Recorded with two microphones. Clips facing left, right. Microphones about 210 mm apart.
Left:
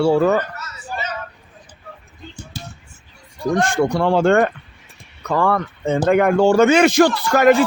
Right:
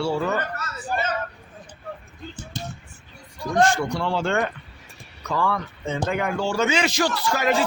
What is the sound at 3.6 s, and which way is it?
A man's voice, 55° left (ahead or behind).